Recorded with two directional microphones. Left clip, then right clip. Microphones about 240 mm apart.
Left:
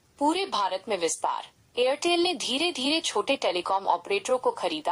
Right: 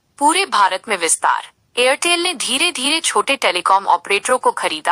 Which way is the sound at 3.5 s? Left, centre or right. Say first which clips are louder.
Right 11 dB; right.